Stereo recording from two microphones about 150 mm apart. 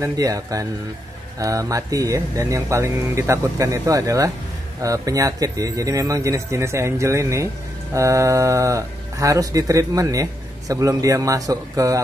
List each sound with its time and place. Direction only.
0.0 s speech: 20° right (ahead or behind)